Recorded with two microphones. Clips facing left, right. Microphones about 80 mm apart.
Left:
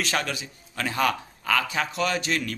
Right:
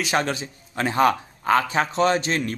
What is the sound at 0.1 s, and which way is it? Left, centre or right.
A man's voice, right.